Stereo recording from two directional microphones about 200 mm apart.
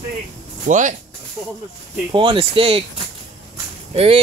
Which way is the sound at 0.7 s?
40° right (ahead or behind).